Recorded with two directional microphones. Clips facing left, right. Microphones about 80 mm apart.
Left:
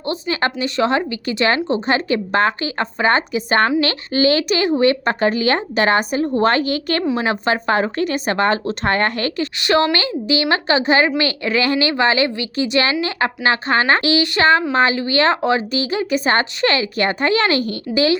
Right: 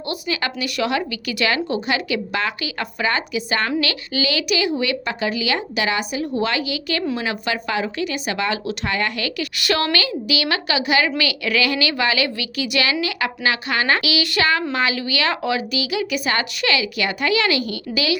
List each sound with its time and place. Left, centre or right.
0.1 s speech: left
9.6 s speech: left